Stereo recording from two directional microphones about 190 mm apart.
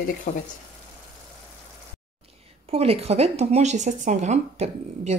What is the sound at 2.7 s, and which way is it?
Speech, 30° right (ahead or behind).